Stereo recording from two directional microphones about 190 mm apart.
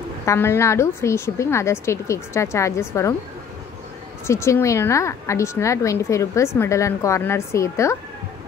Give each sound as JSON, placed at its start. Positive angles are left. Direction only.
{"t": 0.2, "sound": "a woman's voice", "side_deg": 15}
{"t": 4.3, "sound": "a woman's voice", "side_deg": 15}